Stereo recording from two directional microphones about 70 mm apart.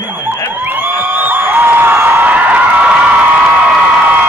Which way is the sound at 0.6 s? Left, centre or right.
Right.